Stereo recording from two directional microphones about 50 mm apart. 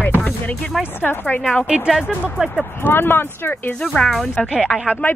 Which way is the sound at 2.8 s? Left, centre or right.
Left.